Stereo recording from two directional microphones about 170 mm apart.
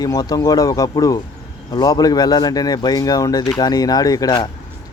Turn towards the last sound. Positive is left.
turn(degrees=20)  # may be behind; listen again after turning